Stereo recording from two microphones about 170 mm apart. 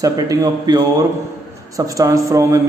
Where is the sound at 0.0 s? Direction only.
20° right (ahead or behind).